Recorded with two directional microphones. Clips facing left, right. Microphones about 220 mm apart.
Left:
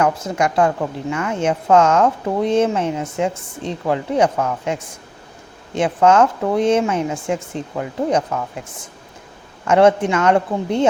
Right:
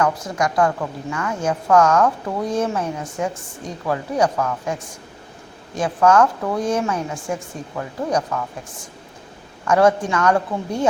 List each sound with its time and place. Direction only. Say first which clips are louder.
0.0 s a woman's voice: left 2 dB; 25° left (ahead or behind)
9.6 s a woman's voice: left 3 dB; 25° left (ahead or behind)